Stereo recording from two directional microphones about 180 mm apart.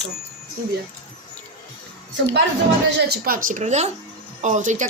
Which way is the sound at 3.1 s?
55° right (ahead or behind).